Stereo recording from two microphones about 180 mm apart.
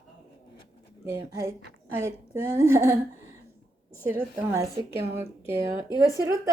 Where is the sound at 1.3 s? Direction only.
15° right (ahead or behind).